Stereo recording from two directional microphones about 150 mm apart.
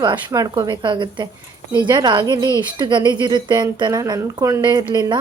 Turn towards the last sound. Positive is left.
turn(degrees=-30)  # may be behind; listen again after turning